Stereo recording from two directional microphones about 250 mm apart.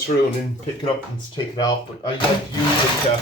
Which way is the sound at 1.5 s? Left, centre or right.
Centre.